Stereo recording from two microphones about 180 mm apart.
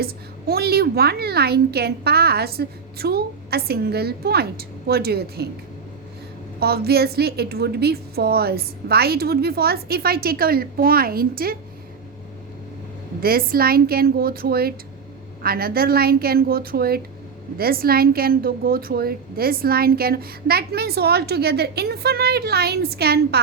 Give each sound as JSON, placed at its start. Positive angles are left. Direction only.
{"t": 0.0, "sound": "a woman's voice", "side_deg": -60}
{"t": 6.6, "sound": "a woman's voice", "side_deg": -60}
{"t": 13.1, "sound": "a woman's voice", "side_deg": -55}